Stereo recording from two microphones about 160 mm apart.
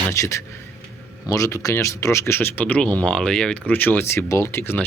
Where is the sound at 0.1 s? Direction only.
20° left (ahead or behind).